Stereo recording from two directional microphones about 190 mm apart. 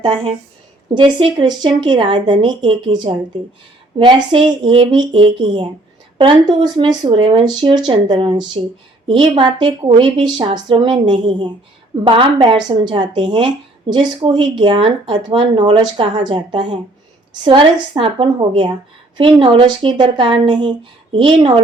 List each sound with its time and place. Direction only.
0.0 s speech: 25° right (ahead or behind)